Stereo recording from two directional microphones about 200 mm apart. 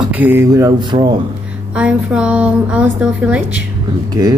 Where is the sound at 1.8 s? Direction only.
5° right (ahead or behind).